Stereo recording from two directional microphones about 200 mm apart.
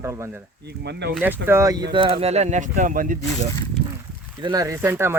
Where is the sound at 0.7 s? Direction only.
60° right (ahead or behind).